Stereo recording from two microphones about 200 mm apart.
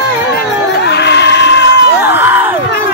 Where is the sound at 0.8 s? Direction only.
60° left (ahead or behind).